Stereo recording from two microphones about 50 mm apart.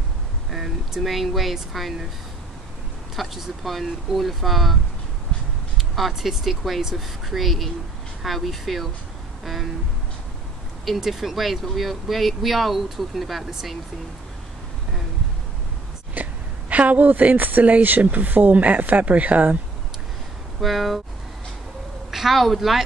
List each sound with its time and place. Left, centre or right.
0.5 s speech: centre
3.2 s speech: centre
5.8 s speech: centre
9.4 s a sound: centre
10.9 s speech: centre
16.2 s a woman's voice: right
20.6 s speech: centre
22.1 s a woman's voice: centre